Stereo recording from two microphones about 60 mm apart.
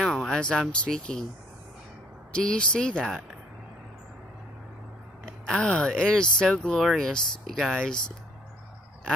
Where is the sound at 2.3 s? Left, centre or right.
Centre.